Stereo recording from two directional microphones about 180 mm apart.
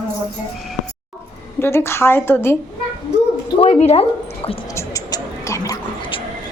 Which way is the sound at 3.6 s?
40° left (ahead or behind).